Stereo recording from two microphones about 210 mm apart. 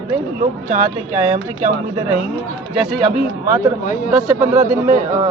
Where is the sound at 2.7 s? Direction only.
Centre (ahead or behind).